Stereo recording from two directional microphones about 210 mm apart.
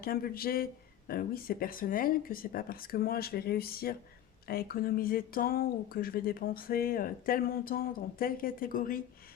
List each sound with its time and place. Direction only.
0.0 s speech: 45° left (ahead or behind)